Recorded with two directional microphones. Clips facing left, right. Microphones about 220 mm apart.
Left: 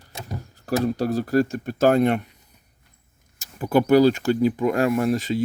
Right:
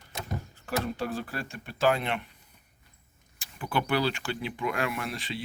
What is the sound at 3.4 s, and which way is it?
Speech, 40° left (ahead or behind).